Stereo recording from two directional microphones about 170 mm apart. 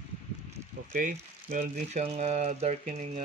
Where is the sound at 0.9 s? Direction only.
55° right (ahead or behind).